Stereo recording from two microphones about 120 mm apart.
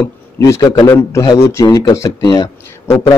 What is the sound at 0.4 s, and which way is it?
A man's voice, 25° left (ahead or behind).